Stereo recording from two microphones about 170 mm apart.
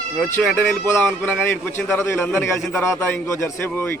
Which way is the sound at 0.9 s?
15° left (ahead or behind).